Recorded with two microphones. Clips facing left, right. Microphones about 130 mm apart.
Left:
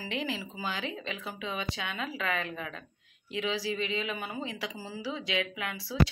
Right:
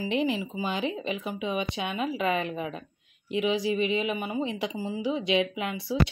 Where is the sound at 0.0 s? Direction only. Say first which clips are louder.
Right 8 dB; 20° right (ahead or behind).